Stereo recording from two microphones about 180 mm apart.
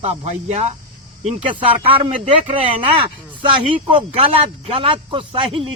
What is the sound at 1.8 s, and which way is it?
Speech, 30° right (ahead or behind).